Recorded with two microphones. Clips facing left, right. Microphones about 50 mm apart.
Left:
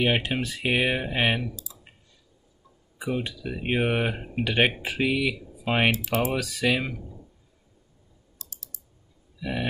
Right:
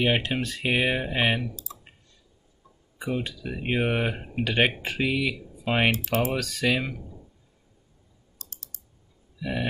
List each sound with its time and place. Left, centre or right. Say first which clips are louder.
0.0 s speech: even; centre
1.5 s clicking: right 2 dB; right
3.0 s speech: left 1 dB; centre
8.4 s typing: even; right
9.4 s speech: even; centre